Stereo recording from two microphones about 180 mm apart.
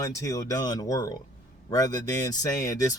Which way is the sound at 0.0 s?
20° left (ahead or behind).